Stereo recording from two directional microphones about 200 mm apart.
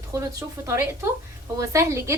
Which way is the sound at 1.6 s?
15° right (ahead or behind).